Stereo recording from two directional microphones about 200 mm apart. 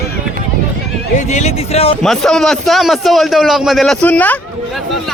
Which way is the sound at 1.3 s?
35° left (ahead or behind).